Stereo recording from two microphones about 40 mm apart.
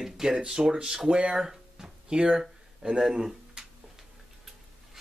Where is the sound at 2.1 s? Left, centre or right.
Centre.